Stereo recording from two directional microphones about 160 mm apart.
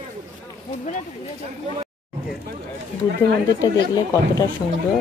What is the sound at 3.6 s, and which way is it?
Speech, 20° left (ahead or behind).